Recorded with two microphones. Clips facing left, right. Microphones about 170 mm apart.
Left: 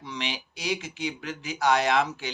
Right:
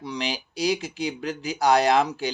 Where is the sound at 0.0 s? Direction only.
35° right (ahead or behind).